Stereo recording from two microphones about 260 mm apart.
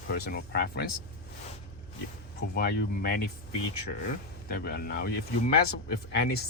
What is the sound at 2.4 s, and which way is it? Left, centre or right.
Speech, left.